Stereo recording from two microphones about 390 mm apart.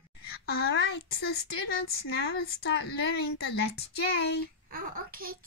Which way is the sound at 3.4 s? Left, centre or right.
Left.